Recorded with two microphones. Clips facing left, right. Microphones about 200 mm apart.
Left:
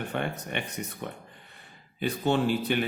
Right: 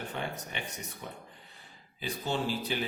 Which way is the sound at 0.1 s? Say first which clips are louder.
Left 6 dB; 60° left (ahead or behind).